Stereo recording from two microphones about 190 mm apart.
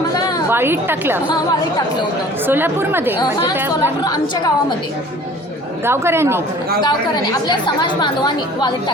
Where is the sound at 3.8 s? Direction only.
20° left (ahead or behind).